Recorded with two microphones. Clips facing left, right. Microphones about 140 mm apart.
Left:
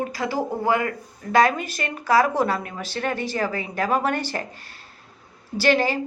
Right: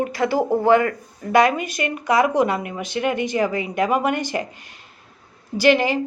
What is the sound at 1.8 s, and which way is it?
Speech, 15° right (ahead or behind).